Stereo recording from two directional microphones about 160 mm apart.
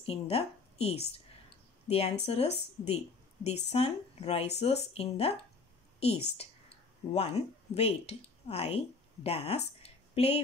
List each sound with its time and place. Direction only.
0.0 s a woman's voice: 35° left (ahead or behind)